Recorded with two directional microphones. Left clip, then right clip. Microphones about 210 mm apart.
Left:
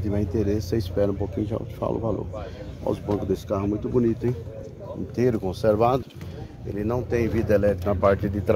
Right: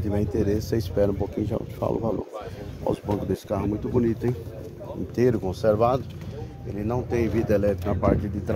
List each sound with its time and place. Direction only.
0.1 s speech: 10° right (ahead or behind)
5.4 s a man's voice: 5° left (ahead or behind)